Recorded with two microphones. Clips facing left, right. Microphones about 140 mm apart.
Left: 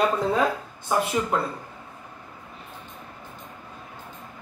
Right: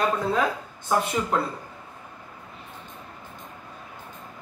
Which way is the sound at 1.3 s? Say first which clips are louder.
Right 1 dB; centre (ahead or behind).